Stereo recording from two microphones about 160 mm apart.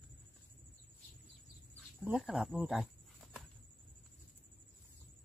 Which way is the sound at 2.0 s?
5° right (ahead or behind).